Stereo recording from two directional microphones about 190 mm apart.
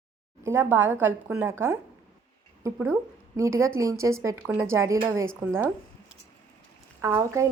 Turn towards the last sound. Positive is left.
turn(degrees=-15)  # may be behind; listen again after turning